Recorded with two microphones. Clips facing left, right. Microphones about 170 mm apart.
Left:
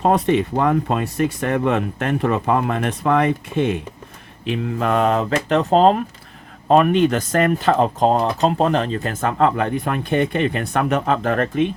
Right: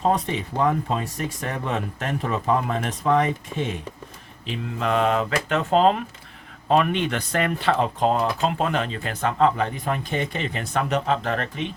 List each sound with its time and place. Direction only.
0.0 s speech: 65° left (ahead or behind)
4.4 s speech: 50° left (ahead or behind)